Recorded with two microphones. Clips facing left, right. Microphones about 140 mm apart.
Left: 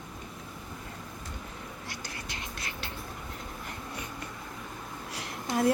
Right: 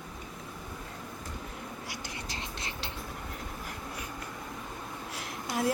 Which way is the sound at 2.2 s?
30° right (ahead or behind).